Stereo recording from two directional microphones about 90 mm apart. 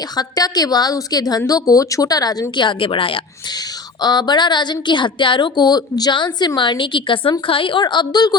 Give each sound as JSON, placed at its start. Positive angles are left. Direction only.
{"t": 0.2, "sound": "a woman's voice", "side_deg": 45}
{"t": 2.6, "sound": "a woman's voice", "side_deg": 75}
{"t": 4.0, "sound": "a woman's voice", "side_deg": 50}